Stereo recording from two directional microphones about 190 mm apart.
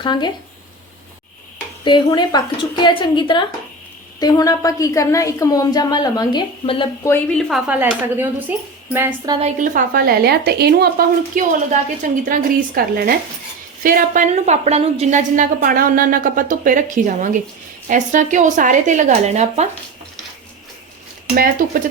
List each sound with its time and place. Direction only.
0.0 s a woman's voice: 25° left (ahead or behind)
1.8 s a woman's voice: 25° left (ahead or behind)
7.3 s a woman's voice: centre (ahead or behind)
9.6 s a woman's voice: 45° right (ahead or behind)
21.3 s a woman's voice: 50° right (ahead or behind)